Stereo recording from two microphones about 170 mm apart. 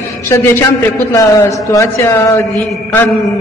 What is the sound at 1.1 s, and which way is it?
Speech, 20° left (ahead or behind).